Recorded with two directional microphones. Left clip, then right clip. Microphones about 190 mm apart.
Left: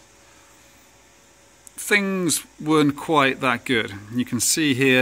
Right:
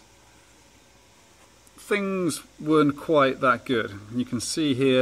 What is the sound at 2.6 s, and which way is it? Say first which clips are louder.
Speech: left 1 dB; 20° left (ahead or behind).